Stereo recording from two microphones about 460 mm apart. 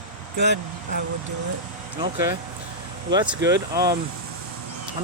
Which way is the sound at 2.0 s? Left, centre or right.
Centre.